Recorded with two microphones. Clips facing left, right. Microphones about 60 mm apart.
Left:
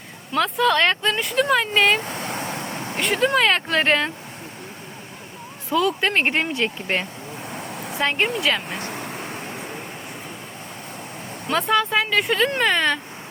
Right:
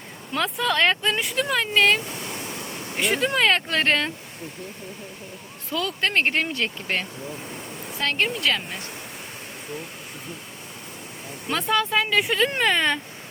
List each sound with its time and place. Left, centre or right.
0.3 s speech: centre
2.0 s a sound: left
3.0 s speech: centre
5.7 s speech: centre
8.7 s vehicle: left
11.5 s speech: centre